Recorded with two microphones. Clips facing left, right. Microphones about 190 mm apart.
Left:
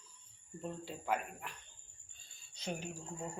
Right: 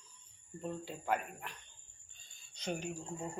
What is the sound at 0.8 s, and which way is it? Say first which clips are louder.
Speech: even; centre (ahead or behind).